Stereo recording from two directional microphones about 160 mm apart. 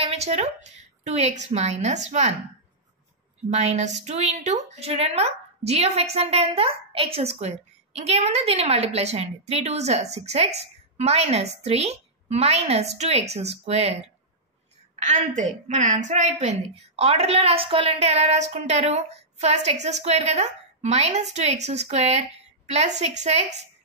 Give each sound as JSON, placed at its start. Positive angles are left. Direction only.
{"t": 0.0, "sound": "a woman's voice", "side_deg": -40}
{"t": 3.4, "sound": "a woman's voice", "side_deg": -45}
{"t": 15.0, "sound": "a woman's voice", "side_deg": -50}